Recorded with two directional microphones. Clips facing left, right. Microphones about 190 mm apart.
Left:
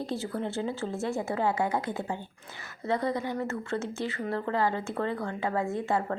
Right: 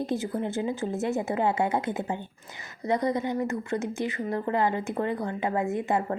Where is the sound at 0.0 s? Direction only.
20° right (ahead or behind).